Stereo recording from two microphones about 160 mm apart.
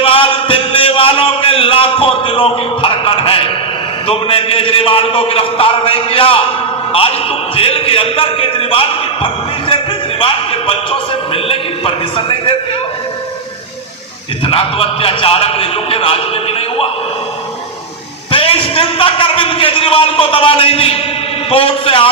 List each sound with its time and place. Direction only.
0.0 s a sound: 35° left (ahead or behind)
4.0 s a man's voice: 35° left (ahead or behind)
7.5 s a man's voice: 35° left (ahead or behind)
14.4 s a man's voice: 35° left (ahead or behind)
18.3 s a man's voice: 35° left (ahead or behind)